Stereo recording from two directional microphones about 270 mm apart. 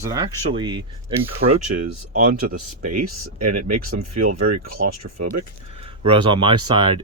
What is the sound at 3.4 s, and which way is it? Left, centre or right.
Speech, right.